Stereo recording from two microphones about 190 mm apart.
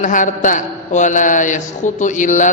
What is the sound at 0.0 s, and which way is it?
A man's voice, 45° left (ahead or behind).